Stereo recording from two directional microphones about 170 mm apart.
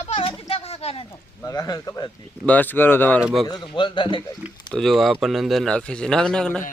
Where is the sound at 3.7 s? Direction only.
25° left (ahead or behind).